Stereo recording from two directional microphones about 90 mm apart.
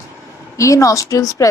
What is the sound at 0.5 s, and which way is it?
Speech, 35° left (ahead or behind).